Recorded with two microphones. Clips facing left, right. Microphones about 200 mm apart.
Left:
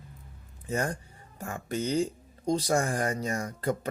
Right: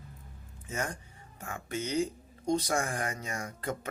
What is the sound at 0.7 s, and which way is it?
Speech, 35° left (ahead or behind).